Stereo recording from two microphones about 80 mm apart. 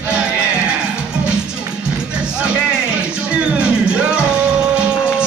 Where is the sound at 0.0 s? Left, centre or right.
Centre.